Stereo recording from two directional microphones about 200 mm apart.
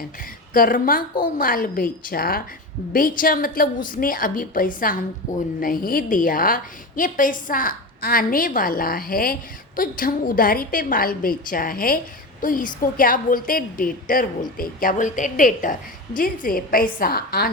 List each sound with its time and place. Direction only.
0.5 s a woman's voice: 45° left (ahead or behind)